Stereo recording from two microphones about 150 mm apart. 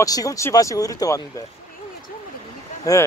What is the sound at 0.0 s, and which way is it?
Speech, 25° left (ahead or behind).